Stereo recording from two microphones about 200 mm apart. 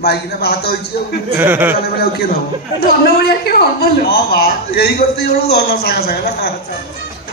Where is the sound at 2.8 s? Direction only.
50° left (ahead or behind).